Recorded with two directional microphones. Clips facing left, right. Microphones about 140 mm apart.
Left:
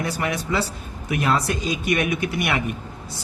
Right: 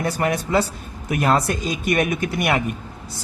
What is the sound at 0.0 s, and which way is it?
Speech, 45° right (ahead or behind).